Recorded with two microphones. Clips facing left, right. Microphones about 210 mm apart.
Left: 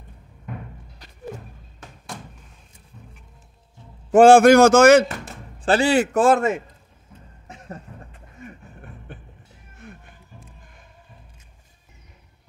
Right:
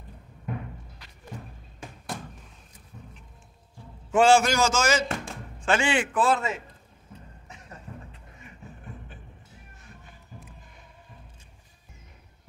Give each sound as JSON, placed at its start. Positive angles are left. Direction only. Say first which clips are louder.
{"t": 4.1, "sound": "a man's voice", "louder": "left 9 dB", "side_deg": 50}
{"t": 5.6, "sound": "a man's voice", "louder": "left 7 dB", "side_deg": 35}
{"t": 8.1, "sound": "a sound", "louder": "left 8 dB", "side_deg": 50}